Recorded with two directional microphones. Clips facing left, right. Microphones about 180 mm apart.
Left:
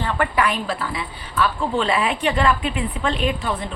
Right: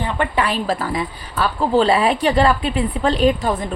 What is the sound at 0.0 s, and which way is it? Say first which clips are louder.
Speech: right 1 dB; 15° right (ahead or behind).